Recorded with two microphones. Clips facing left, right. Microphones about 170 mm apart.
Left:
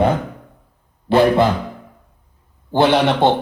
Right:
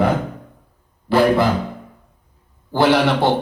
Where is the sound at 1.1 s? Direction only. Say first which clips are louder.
Left 2 dB; 25° left (ahead or behind).